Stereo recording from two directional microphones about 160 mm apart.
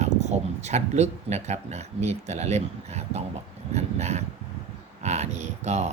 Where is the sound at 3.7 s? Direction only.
45° right (ahead or behind).